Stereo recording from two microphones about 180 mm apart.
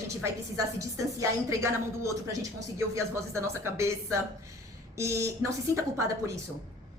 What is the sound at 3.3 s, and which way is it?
Speech, 15° right (ahead or behind).